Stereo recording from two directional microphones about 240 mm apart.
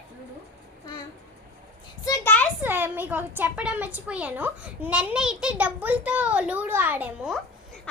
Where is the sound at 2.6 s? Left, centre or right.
Centre.